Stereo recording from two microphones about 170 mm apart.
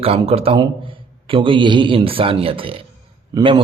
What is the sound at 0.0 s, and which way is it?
A man's voice, 35° right (ahead or behind).